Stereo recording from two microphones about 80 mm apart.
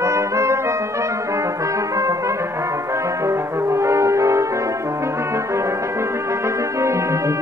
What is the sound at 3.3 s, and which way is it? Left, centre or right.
Brass instrument, right.